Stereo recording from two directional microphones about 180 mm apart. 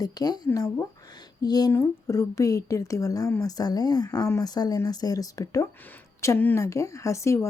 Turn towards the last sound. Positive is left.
turn(degrees=15)  # may be behind; listen again after turning